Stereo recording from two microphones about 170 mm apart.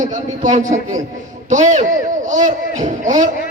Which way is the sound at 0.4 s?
45° right (ahead or behind).